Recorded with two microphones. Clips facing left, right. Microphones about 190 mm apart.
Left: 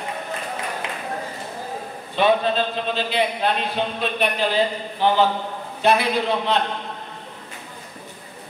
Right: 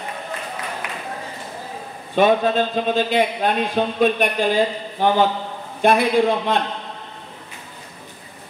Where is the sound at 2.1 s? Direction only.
45° right (ahead or behind).